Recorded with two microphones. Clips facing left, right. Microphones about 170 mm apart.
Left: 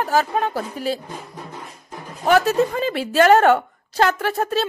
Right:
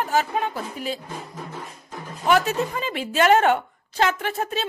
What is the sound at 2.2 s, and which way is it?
A woman's voice, 40° left (ahead or behind).